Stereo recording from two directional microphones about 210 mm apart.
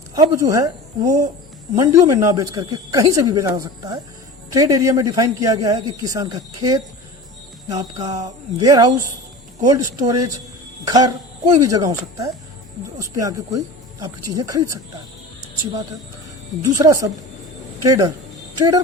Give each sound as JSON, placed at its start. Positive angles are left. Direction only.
{"t": 0.2, "sound": "speech", "side_deg": -15}
{"t": 16.7, "sound": "speech", "side_deg": -15}